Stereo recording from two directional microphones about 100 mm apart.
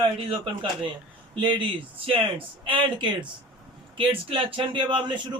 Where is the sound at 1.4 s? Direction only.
55° right (ahead or behind).